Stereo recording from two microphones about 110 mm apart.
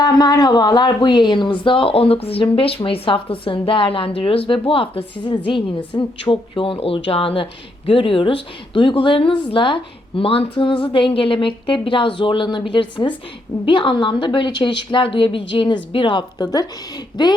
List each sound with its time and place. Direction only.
0.0 s a woman's voice: 40° left (ahead or behind)